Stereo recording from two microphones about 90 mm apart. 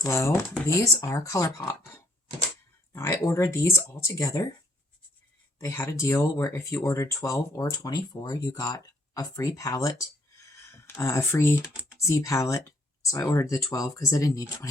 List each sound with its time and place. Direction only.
0.0 s speech: 35° left (ahead or behind)
5.5 s speech: 35° left (ahead or behind)